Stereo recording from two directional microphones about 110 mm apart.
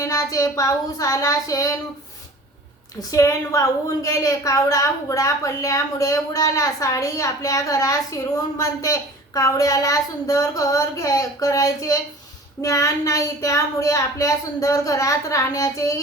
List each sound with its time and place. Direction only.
0.0 s a woman's voice: 30° left (ahead or behind)
3.1 s a woman's voice: 30° left (ahead or behind)